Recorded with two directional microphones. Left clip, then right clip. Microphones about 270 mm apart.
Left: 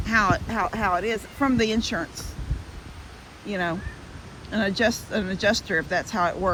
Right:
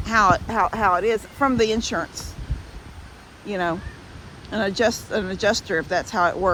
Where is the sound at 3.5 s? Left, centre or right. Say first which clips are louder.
Right 3 dB; centre.